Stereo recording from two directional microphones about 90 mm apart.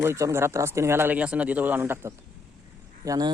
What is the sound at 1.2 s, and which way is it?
Speech, 15° right (ahead or behind).